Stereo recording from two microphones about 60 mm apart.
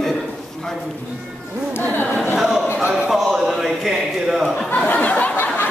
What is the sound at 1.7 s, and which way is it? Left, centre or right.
Speech, left.